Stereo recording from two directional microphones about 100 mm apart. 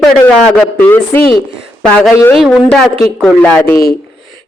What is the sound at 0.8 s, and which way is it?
Speech, 20° left (ahead or behind).